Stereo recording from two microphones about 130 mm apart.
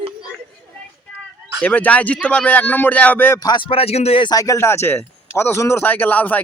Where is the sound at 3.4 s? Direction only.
35° left (ahead or behind); by 4.2 s 50° left (ahead or behind).